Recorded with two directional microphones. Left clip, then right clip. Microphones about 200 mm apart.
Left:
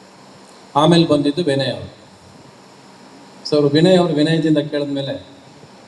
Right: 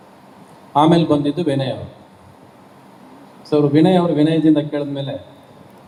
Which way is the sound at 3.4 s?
50° left (ahead or behind).